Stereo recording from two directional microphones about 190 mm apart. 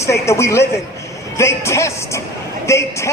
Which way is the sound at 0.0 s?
15° left (ahead or behind).